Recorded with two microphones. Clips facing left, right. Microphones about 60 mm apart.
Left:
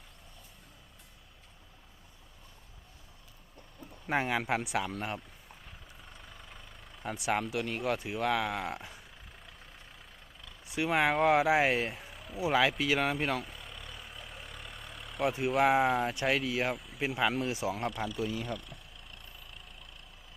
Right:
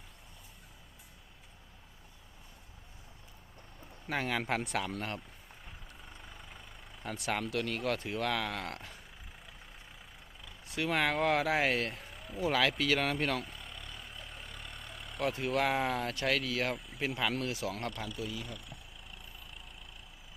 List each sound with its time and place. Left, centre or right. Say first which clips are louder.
4.0 s speech: left 3 dB; centre
5.6 s vehicle: right 3 dB; centre
7.0 s speech: left 3 dB; centre
10.7 s speech: left 3 dB; centre
12.4 s vehicle: left 2 dB; centre
15.2 s speech: left 4 dB; centre
16.7 s speech: left 2 dB; centre
18.4 s a sound: left 7 dB; centre